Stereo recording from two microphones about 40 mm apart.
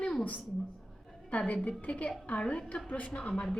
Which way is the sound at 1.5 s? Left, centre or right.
Left.